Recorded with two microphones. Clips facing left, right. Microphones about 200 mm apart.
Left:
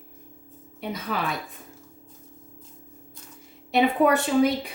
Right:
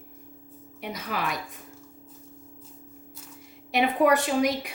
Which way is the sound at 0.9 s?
30° left (ahead or behind).